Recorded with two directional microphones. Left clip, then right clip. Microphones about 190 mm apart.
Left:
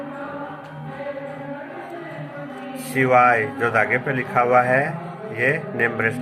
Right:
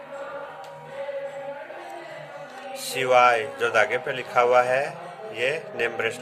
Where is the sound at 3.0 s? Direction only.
90° right.